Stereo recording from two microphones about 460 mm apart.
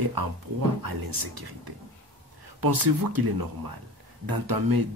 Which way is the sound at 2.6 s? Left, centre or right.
Right.